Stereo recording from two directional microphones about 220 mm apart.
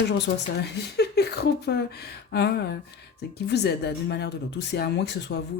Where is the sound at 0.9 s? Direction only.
50° left (ahead or behind).